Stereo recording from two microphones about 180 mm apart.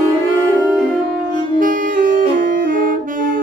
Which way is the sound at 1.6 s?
50° right (ahead or behind).